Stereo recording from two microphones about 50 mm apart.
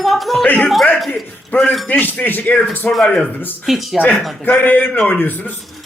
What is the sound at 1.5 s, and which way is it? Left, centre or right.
Speech, left.